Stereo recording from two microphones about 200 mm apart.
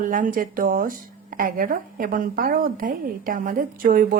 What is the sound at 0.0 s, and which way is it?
Speech, 45° right (ahead or behind).